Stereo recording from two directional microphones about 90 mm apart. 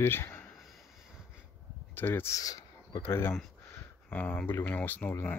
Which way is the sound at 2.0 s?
20° left (ahead or behind).